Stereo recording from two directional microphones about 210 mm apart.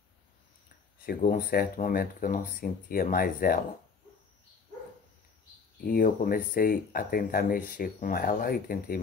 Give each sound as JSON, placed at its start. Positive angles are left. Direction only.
{"t": 1.0, "sound": "speech", "side_deg": 45}
{"t": 5.9, "sound": "speech", "side_deg": 45}